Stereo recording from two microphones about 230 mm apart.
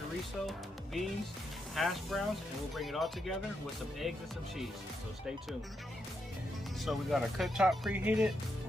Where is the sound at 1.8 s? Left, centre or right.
Centre.